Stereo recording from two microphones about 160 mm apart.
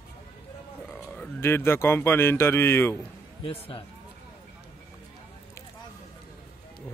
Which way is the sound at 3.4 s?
35° left (ahead or behind).